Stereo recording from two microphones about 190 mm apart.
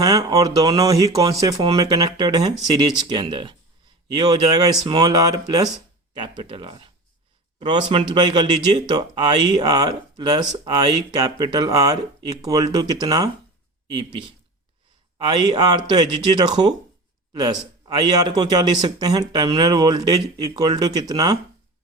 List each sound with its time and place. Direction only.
0.0 s a man's voice: 20° right (ahead or behind)